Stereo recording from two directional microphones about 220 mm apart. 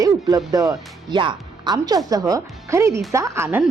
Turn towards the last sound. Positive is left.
turn(degrees=-10)  # may be behind; listen again after turning